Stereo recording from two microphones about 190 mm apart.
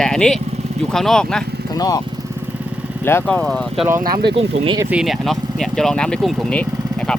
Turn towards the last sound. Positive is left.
turn(degrees=5)  # may be behind; listen again after turning